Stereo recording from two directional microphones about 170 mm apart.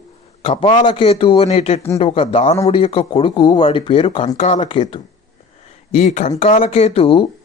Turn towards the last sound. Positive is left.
turn(degrees=35)  # may be behind; listen again after turning